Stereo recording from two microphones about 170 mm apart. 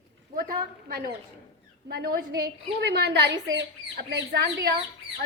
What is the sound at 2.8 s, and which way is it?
Speech, 80° right.